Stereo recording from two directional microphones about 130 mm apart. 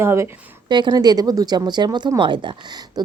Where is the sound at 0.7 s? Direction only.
35° right (ahead or behind).